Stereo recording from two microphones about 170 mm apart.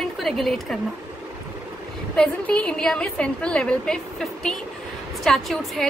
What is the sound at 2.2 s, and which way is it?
A woman's voice, 5° left (ahead or behind).